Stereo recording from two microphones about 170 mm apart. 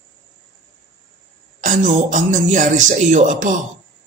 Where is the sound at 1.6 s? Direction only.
45° right (ahead or behind).